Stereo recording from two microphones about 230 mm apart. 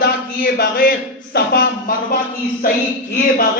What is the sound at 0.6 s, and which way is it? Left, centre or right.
A man's voice, left.